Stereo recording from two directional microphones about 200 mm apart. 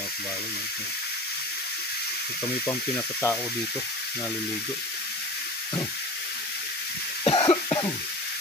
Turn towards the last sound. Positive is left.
turn(degrees=25)  # may be behind; listen again after turning